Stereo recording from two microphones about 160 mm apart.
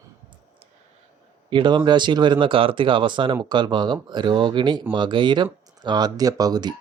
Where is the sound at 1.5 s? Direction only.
30° right (ahead or behind).